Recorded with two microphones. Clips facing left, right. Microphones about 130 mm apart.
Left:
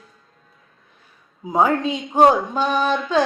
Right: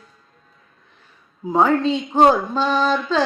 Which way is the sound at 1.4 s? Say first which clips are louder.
Right 2 dB; 10° left (ahead or behind).